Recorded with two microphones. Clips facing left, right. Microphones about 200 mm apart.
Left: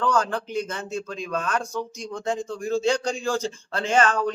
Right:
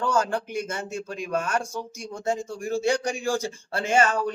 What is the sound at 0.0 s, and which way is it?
A man's voice, 10° right (ahead or behind).